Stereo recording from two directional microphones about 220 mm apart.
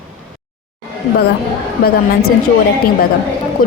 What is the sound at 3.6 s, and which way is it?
Speech, 40° left (ahead or behind).